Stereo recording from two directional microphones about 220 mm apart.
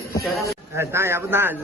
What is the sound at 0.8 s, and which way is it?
Speech, 10° right (ahead or behind).